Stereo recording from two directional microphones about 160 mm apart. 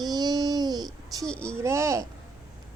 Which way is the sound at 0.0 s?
25° right (ahead or behind).